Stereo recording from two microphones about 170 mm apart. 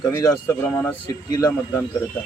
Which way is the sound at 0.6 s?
10° left (ahead or behind).